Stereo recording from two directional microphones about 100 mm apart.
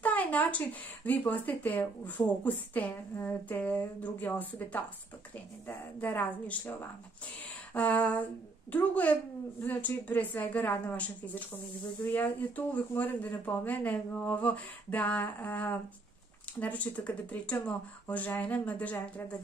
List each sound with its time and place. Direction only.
0.0 s speech: 15° left (ahead or behind)